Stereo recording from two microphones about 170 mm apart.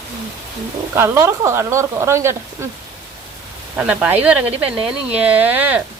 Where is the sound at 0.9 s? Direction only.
15° right (ahead or behind).